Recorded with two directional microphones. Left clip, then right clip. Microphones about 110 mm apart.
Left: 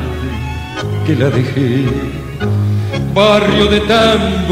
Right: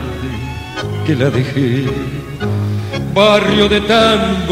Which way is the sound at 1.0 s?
25° left (ahead or behind).